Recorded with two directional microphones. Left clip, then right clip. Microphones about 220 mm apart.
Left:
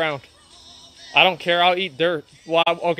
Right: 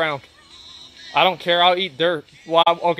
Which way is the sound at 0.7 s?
50° left (ahead or behind).